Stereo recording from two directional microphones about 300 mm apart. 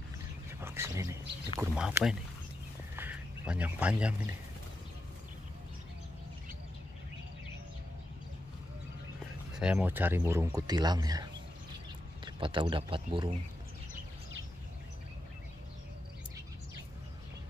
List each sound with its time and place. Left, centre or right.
0.5 s a sound: centre
1.6 s speech: centre
3.0 s duck: centre
9.6 s speech: centre
12.4 s speech: centre